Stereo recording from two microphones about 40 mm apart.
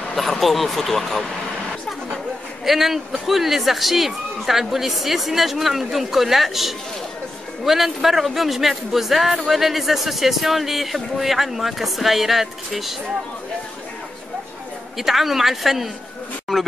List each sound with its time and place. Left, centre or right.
0.1 s speech: centre
2.6 s a man's voice: centre
15.0 s a man's voice: centre